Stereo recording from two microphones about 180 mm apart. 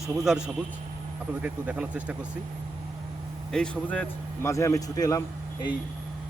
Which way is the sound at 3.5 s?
5° left (ahead or behind).